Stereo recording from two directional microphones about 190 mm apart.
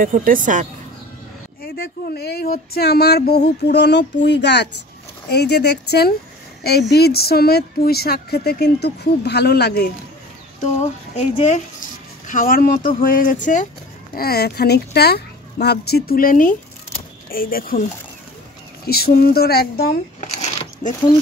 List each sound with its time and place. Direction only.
0.0 s speech: 45° right (ahead or behind)
1.6 s speech: 55° left (ahead or behind)
10.6 s speech: 40° left (ahead or behind)
14.1 s speech: 55° left (ahead or behind)
18.9 s speech: 55° left (ahead or behind)
20.2 s a sound: 40° left (ahead or behind)